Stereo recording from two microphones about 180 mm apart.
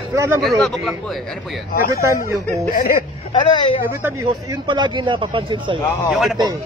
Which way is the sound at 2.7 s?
50° left (ahead or behind).